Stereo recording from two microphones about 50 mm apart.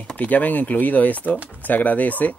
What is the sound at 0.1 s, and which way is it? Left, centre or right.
Speech, left.